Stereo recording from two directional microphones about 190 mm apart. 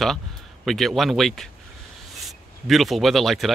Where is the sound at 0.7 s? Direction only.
Centre (ahead or behind).